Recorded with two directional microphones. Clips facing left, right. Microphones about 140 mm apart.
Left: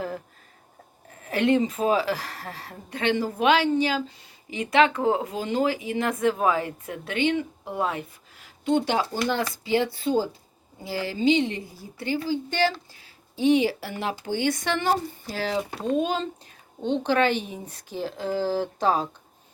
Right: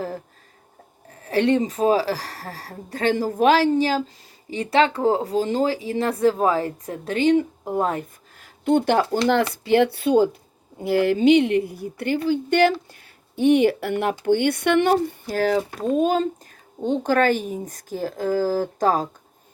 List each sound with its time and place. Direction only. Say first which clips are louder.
1.1 s speech: right 2 dB; 35° right (ahead or behind)